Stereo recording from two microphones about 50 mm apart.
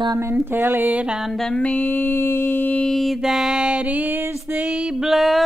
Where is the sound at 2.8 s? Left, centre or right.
Centre.